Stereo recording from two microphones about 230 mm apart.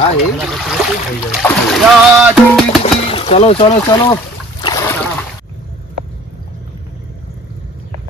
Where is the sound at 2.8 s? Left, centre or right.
Left.